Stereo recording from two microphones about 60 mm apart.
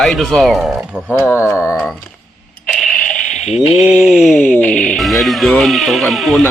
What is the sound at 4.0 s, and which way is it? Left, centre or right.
Speech, centre.